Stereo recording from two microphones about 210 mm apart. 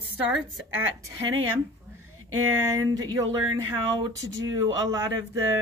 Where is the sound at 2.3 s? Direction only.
90° right.